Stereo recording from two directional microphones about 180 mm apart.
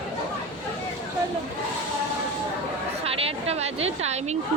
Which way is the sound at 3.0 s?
35° right (ahead or behind).